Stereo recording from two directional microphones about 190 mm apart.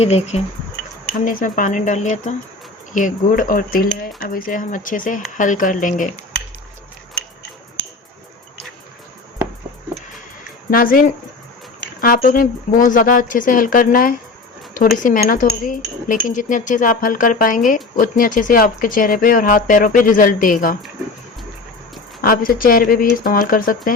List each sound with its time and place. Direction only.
0.0 s speech: 35° left (ahead or behind)
1.2 s speech: 45° left (ahead or behind)
10.7 s speech: 45° left (ahead or behind)
22.2 s speech: 50° left (ahead or behind)